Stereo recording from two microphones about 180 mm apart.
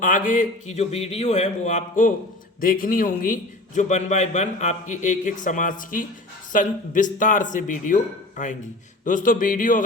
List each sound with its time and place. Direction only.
0.0 s a man's voice: 50° left (ahead or behind)